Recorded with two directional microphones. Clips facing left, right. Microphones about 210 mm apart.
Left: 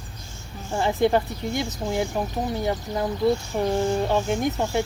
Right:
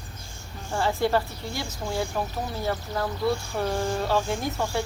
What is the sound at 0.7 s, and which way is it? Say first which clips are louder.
Speech: left 3 dB; 20° left (ahead or behind).